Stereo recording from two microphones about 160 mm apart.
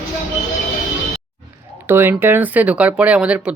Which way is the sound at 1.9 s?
15° right (ahead or behind).